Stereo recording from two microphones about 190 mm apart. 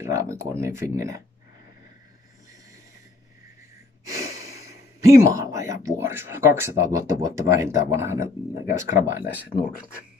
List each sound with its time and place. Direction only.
0.0 s speech: 15° right (ahead or behind)
4.5 s a sound: 15° right (ahead or behind)
5.9 s speech: 10° right (ahead or behind)
9.5 s speech: 20° left (ahead or behind)